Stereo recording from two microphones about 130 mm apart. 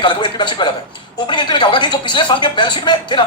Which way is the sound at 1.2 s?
35° left (ahead or behind).